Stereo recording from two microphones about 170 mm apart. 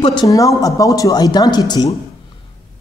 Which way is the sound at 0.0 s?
25° left (ahead or behind).